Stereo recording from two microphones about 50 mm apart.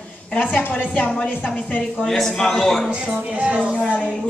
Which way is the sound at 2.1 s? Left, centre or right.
Centre.